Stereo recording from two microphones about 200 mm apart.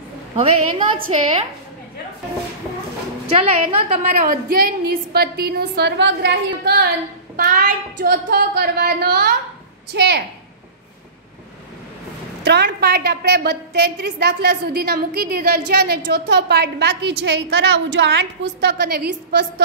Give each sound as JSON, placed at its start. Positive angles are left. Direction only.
{"t": 0.4, "sound": "a woman's voice", "side_deg": -25}
{"t": 3.3, "sound": "a woman's voice", "side_deg": -30}
{"t": 4.0, "sound": "a woman's voice", "side_deg": -40}
{"t": 12.4, "sound": "a woman's voice", "side_deg": -55}